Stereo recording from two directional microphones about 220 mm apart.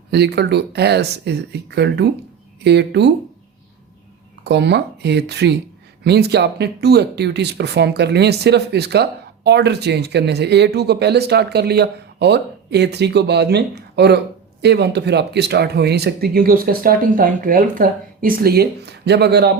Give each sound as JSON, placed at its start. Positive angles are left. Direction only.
{"t": 0.1, "sound": "speech", "side_deg": -50}
{"t": 4.4, "sound": "speech", "side_deg": -50}